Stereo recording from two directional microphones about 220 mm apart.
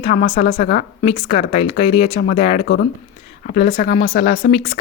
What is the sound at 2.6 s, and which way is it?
A woman's voice, 45° left (ahead or behind).